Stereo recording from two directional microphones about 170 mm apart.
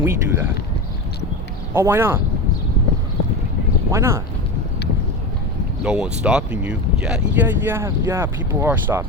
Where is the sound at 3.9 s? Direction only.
15° right (ahead or behind).